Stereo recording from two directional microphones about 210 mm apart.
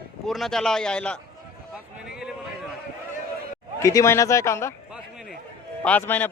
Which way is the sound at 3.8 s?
15° left (ahead or behind).